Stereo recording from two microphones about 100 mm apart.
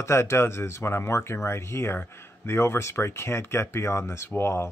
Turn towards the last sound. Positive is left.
turn(degrees=25)  # may be behind; listen again after turning